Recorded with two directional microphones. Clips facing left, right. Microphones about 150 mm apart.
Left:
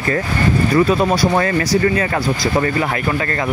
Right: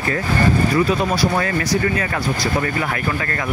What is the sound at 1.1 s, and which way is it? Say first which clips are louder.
Speech: left 3 dB; 35° left (ahead or behind).